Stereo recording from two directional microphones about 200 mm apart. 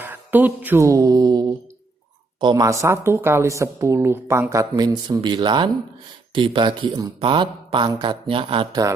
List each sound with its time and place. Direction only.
0.0 s music: 10° right (ahead or behind)
2.4 s speech: 20° right (ahead or behind)